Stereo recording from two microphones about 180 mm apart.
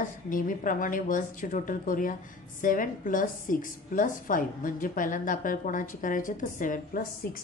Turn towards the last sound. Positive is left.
turn(degrees=50)  # may be behind; listen again after turning